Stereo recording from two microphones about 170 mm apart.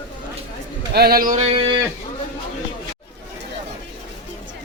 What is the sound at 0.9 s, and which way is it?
Speech, 65° right (ahead or behind).